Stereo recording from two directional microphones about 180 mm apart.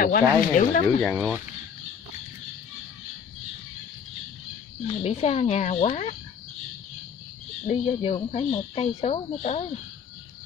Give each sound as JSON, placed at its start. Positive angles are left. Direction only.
{"t": 0.0, "sound": "speech", "side_deg": 50}
{"t": 1.0, "sound": "speech", "side_deg": -10}
{"t": 4.8, "sound": "speech", "side_deg": 35}
{"t": 7.8, "sound": "speech", "side_deg": 30}